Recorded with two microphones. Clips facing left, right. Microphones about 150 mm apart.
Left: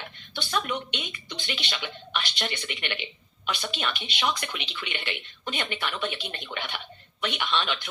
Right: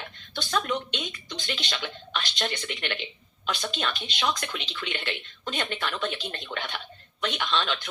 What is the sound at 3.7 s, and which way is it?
Speech, 10° left (ahead or behind).